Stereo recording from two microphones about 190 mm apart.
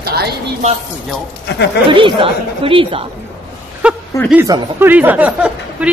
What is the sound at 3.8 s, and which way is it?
A woman's voice, 5° right (ahead or behind).